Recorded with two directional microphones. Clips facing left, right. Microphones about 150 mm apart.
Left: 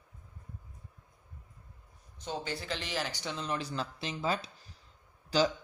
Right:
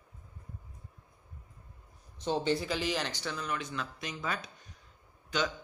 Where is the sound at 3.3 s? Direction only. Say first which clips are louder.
Left 1 dB; 30° left (ahead or behind).